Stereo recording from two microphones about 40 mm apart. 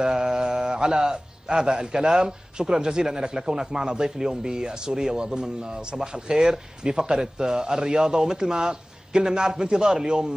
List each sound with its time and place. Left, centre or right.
0.0 s a man's voice: centre